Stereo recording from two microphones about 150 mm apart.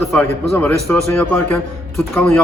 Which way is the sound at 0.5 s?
15° left (ahead or behind).